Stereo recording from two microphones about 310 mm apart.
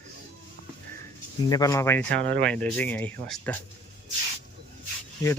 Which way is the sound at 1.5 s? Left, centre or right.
Centre.